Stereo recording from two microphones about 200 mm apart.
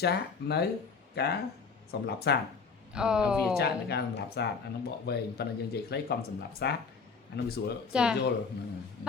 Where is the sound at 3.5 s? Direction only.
55° left (ahead or behind).